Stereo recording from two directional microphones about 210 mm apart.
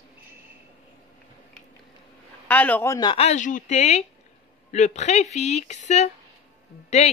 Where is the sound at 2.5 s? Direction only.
10° left (ahead or behind).